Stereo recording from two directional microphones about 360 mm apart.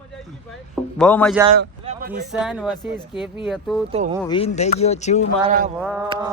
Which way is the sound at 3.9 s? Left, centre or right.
Centre.